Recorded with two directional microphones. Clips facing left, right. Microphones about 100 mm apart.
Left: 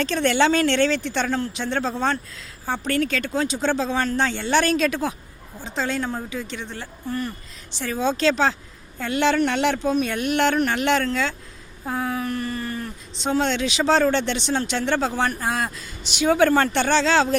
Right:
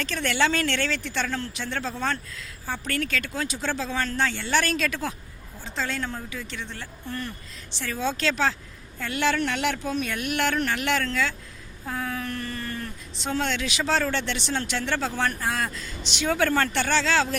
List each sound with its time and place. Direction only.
0.0 s speech: 30° left (ahead or behind)
11.9 s a sound: 25° left (ahead or behind)
13.2 s speech: 25° left (ahead or behind)